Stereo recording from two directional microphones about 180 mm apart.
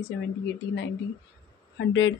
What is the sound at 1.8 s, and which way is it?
Speech, 90° left.